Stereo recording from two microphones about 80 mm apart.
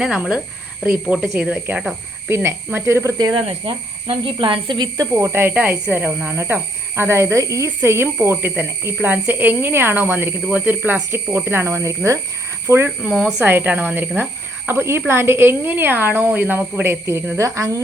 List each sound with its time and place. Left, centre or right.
0.0 s a woman's voice: centre
2.3 s speech: right
3.3 s speech: right
5.1 s a woman's voice: right
7.8 s a woman's voice: right
13.0 s a woman's voice: centre; by 17.7 s right